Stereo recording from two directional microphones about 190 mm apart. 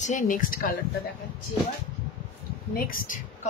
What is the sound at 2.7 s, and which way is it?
Speech, 45° left (ahead or behind).